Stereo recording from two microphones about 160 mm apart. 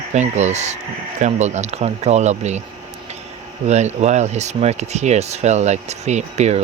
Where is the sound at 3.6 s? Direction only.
45° right (ahead or behind).